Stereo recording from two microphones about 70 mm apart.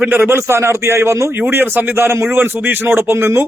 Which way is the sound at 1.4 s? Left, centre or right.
Right.